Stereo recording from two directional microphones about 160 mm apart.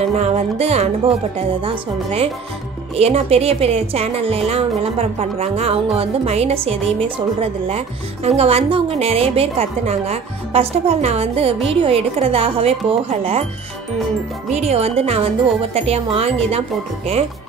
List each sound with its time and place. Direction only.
0.0 s music: 40° right (ahead or behind)
1.6 s speech: 40° right (ahead or behind)
14.5 s speech: 40° right (ahead or behind)